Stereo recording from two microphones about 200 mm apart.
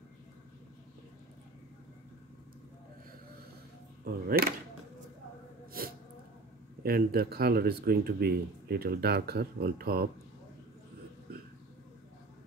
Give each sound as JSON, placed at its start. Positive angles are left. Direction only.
{"t": 4.3, "sound": "speech", "side_deg": -50}
{"t": 5.8, "sound": "sneeze", "side_deg": -45}
{"t": 6.8, "sound": "speech", "side_deg": -50}